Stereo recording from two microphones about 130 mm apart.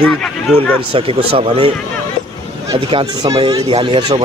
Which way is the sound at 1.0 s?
45° right (ahead or behind).